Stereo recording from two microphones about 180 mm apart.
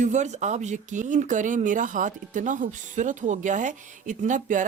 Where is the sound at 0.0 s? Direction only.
40° right (ahead or behind).